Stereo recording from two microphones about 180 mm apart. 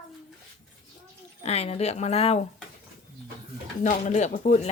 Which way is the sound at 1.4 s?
35° left (ahead or behind).